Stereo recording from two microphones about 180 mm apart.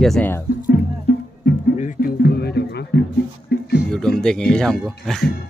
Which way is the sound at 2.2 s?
65° left (ahead or behind).